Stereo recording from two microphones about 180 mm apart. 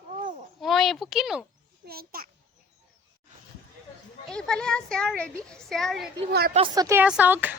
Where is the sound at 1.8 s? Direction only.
55° right (ahead or behind).